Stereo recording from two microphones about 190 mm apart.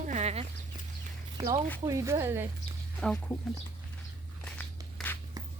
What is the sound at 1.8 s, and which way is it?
Speech, 15° right (ahead or behind).